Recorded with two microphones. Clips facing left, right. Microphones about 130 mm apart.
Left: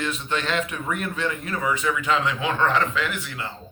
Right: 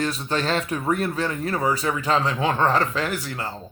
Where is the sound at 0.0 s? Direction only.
35° right (ahead or behind).